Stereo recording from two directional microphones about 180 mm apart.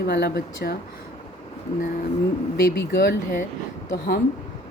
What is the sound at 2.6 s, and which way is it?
Speech, 60° left (ahead or behind).